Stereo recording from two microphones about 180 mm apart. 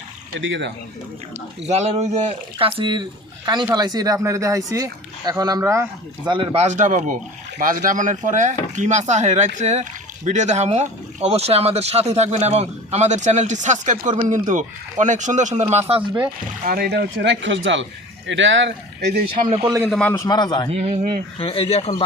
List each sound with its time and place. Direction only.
0.3 s speech: 85° right
1.6 s speech: 35° right (ahead or behind); by 6.3 s 15° right (ahead or behind)
6.3 s speech: 30° right (ahead or behind)
16.0 s speech: 10° right (ahead or behind)
16.6 s speech: 60° right (ahead or behind); by 19.2 s 80° right
19.5 s speech: 30° right (ahead or behind)
19.9 s a man's voice: 10° left (ahead or behind)
20.7 s speech: 40° right (ahead or behind)
21.3 s speech: 30° left (ahead or behind)